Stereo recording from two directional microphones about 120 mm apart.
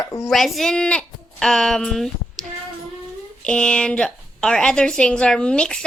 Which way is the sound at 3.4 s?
5° left (ahead or behind).